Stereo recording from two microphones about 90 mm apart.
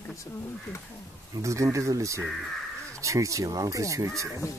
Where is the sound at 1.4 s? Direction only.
35° right (ahead or behind).